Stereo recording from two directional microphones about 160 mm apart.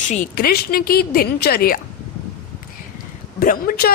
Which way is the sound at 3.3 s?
65° left (ahead or behind).